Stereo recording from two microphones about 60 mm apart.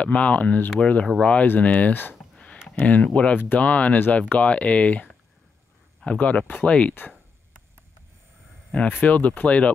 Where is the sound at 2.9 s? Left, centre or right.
Left.